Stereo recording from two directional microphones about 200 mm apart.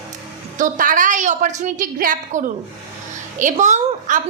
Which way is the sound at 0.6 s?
40° right (ahead or behind).